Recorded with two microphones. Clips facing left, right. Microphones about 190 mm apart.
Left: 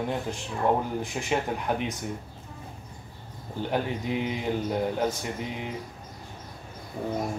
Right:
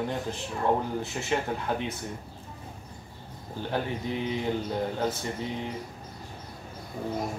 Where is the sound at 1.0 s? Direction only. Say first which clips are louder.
Left 1 dB; 15° left (ahead or behind).